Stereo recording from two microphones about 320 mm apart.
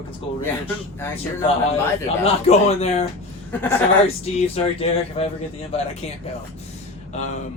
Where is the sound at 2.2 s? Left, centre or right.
Centre.